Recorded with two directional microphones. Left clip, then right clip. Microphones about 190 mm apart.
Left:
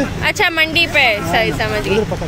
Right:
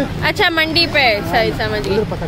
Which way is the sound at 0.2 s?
10° right (ahead or behind).